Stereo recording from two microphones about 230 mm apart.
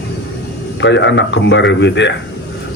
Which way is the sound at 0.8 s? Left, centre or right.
Left.